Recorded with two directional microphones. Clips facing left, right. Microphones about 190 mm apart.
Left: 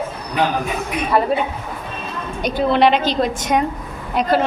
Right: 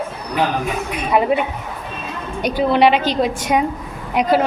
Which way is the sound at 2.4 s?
10° right (ahead or behind).